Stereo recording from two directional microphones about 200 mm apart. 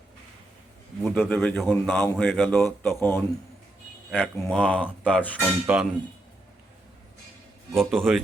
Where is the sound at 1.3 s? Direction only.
5° left (ahead or behind).